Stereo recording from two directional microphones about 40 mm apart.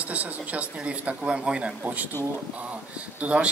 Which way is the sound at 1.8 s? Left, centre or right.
Right.